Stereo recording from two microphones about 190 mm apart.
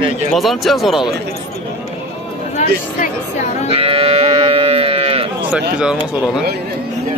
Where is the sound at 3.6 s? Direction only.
30° right (ahead or behind).